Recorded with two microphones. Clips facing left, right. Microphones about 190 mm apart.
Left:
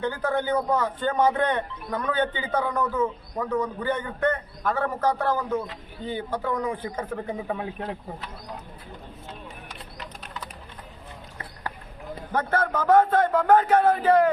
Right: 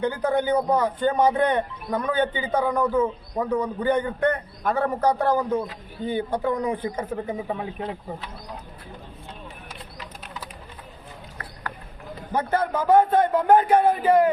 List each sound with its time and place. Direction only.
0.0 s a man's voice: 15° right (ahead or behind)
12.3 s a man's voice: 10° right (ahead or behind)